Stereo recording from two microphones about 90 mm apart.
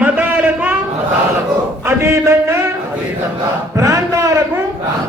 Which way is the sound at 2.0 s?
30° right (ahead or behind).